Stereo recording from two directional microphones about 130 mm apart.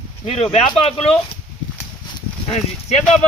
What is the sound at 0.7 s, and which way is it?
Speech, 45° left (ahead or behind).